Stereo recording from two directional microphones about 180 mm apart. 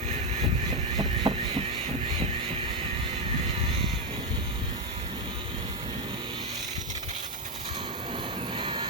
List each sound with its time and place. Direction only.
0.9 s vehicle: 30° right (ahead or behind)
8.5 s train: 25° right (ahead or behind)